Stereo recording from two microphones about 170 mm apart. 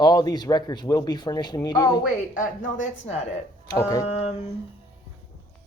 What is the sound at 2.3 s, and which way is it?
Speech, 50° left (ahead or behind).